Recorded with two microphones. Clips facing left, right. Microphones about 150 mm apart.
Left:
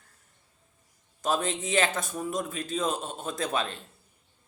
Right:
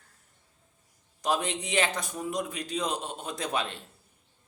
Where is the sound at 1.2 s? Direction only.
15° right (ahead or behind).